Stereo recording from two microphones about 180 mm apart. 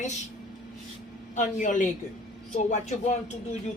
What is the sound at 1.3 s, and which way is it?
A man's voice, 45° left (ahead or behind).